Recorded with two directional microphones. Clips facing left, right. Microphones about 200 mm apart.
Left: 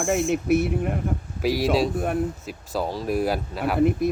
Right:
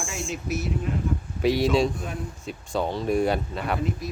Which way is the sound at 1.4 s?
Centre (ahead or behind).